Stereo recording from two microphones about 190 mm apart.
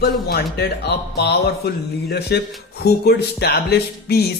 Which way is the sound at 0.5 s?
60° left (ahead or behind).